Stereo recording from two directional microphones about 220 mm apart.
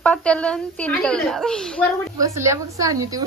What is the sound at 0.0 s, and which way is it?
A woman's voice, 5° left (ahead or behind).